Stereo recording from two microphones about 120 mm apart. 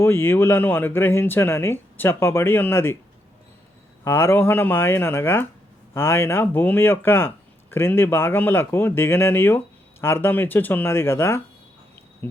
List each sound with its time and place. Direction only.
0.0 s speech: 20° left (ahead or behind)
4.0 s speech: 20° left (ahead or behind)